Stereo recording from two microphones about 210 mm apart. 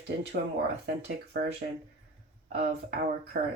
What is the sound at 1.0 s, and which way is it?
Speech, 55° right (ahead or behind).